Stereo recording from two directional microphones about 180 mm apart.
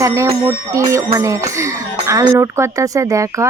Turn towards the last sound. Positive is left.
turn(degrees=-15)  # may be behind; listen again after turning